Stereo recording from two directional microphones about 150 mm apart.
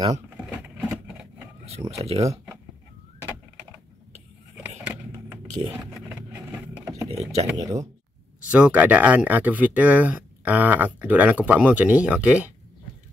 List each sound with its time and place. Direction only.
0.5 s a sound: 10° right (ahead or behind)
1.9 s speech: 45° right (ahead or behind)
2.2 s speech: 20° right (ahead or behind)
4.6 s vehicle: 10° right (ahead or behind)
6.8 s a sound: 20° right (ahead or behind)
7.1 s speech: 45° right (ahead or behind)
7.5 s speech: 20° right (ahead or behind)
8.5 s speech: 10° right (ahead or behind)